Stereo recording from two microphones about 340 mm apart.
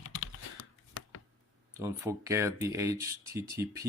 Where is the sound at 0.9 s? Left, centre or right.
Left.